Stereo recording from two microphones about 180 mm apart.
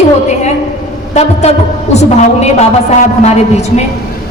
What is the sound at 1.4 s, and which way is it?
A woman's voice, 35° left (ahead or behind).